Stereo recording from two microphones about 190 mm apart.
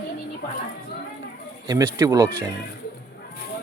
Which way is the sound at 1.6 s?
15° right (ahead or behind).